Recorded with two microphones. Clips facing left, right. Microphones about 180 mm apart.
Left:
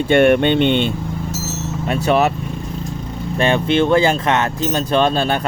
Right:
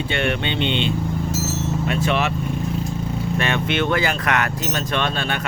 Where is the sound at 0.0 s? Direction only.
50° left (ahead or behind).